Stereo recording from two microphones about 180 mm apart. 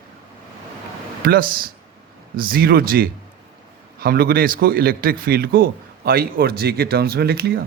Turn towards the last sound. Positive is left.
turn(degrees=-60)  # may be behind; listen again after turning